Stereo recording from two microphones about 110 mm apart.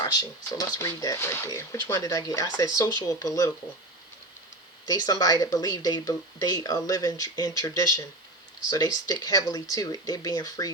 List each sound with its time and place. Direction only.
0.0 s speech: 40° left (ahead or behind)
1.2 s speech: 20° left (ahead or behind)
4.9 s speech: 35° left (ahead or behind)